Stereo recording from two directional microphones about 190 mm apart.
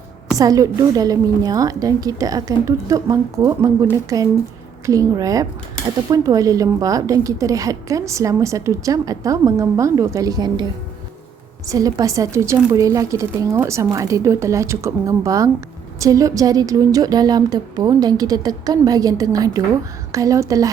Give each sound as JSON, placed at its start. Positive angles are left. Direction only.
{"t": 0.3, "sound": "a woman's voice", "side_deg": -20}
{"t": 11.7, "sound": "a woman's voice", "side_deg": -20}